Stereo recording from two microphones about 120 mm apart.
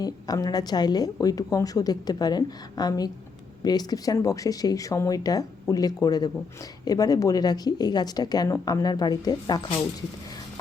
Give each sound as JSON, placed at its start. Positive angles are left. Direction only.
{"t": 0.0, "sound": "a woman's voice", "side_deg": 30}